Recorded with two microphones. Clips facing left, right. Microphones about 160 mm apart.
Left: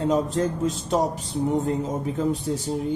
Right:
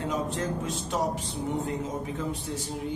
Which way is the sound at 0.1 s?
40° left (ahead or behind).